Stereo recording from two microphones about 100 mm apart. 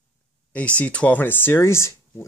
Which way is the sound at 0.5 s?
15° left (ahead or behind).